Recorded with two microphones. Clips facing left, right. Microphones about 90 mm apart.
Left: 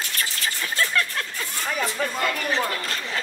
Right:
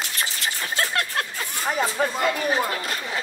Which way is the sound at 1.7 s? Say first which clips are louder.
Right 4 dB; 30° right (ahead or behind).